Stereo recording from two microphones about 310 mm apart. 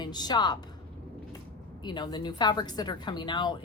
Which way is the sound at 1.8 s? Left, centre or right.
Centre.